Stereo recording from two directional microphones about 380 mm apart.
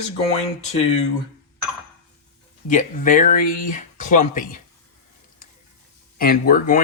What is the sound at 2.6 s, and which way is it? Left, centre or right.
Speech, centre.